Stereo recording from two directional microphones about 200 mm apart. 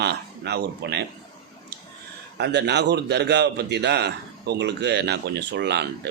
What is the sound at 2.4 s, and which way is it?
A man's voice, 55° right (ahead or behind).